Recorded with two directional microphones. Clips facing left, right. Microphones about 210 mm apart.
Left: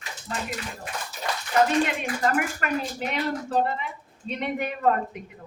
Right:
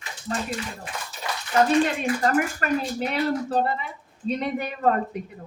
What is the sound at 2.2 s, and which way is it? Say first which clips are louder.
Speech: even; 35° right (ahead or behind).